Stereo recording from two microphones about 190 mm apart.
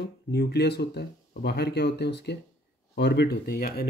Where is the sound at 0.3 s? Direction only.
60° left (ahead or behind).